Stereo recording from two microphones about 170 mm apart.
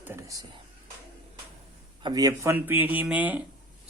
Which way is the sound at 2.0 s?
25° right (ahead or behind).